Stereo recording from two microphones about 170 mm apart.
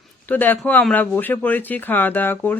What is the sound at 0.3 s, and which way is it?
Speech, 10° left (ahead or behind).